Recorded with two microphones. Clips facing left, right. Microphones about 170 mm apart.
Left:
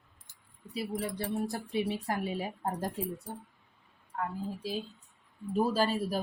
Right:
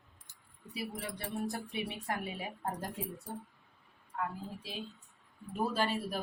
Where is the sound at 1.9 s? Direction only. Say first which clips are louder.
Left 5 dB; 35° left (ahead or behind).